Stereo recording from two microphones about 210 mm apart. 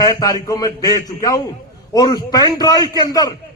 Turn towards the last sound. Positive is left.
turn(degrees=15)  # may be behind; listen again after turning